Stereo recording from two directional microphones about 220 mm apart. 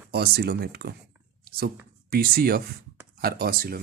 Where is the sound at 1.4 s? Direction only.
45° right (ahead or behind).